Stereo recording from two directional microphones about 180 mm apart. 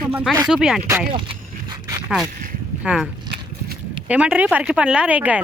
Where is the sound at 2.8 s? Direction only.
Centre (ahead or behind).